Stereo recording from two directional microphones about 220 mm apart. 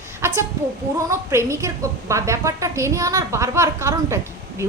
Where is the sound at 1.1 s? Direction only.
10° right (ahead or behind).